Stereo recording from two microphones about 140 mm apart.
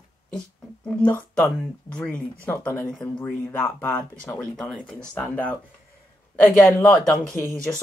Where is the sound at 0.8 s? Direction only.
10° left (ahead or behind).